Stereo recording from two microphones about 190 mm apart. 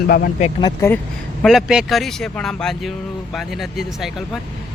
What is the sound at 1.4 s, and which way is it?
Speech, centre (ahead or behind).